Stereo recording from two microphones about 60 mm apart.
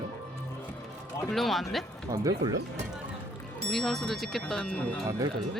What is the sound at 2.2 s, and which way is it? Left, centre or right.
Speech, right.